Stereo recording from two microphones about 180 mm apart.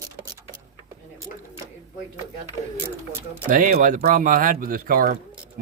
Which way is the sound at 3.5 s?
50° right (ahead or behind).